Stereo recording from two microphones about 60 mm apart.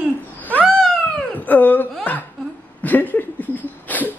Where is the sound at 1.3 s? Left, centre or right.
Left.